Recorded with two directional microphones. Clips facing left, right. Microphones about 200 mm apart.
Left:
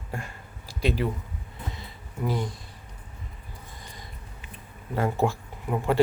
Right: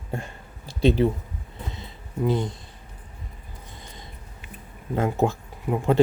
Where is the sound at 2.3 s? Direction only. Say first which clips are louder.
Right 4 dB; 20° right (ahead or behind).